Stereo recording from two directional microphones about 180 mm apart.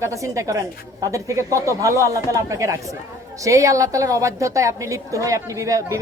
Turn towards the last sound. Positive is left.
turn(degrees=-15)  # may be behind; listen again after turning